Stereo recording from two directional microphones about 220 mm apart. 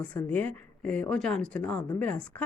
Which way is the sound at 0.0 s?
5° left (ahead or behind).